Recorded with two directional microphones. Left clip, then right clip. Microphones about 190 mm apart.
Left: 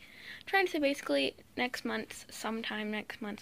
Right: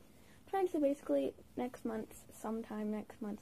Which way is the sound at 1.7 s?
15° left (ahead or behind).